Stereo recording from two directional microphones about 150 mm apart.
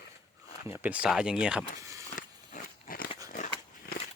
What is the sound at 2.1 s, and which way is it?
Biting, 65° left (ahead or behind).